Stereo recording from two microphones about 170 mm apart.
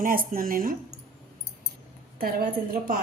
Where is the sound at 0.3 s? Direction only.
55° right (ahead or behind).